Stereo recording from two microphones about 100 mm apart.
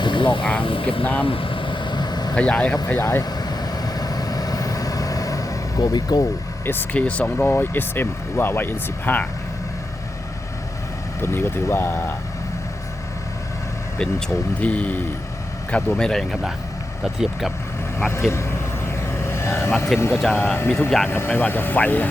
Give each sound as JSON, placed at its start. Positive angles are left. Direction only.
{"t": 0.0, "sound": "vehicle", "side_deg": 55}
{"t": 0.6, "sound": "speech", "side_deg": 60}
{"t": 1.2, "sound": "vehicle", "side_deg": 60}
{"t": 2.3, "sound": "speech", "side_deg": 10}
{"t": 3.0, "sound": "speech", "side_deg": 30}
{"t": 3.2, "sound": "vehicle", "side_deg": 40}
{"t": 6.7, "sound": "speech", "side_deg": 15}
{"t": 11.2, "sound": "speech", "side_deg": 25}
{"t": 14.0, "sound": "speech", "side_deg": 10}
{"t": 18.3, "sound": "vehicle", "side_deg": 25}
{"t": 20.0, "sound": "speech", "side_deg": 25}